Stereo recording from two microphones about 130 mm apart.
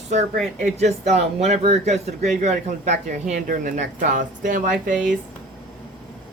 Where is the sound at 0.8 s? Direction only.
60° right (ahead or behind); by 5.1 s 85° right.